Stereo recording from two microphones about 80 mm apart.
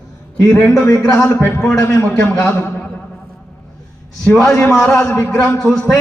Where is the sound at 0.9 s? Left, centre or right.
Left.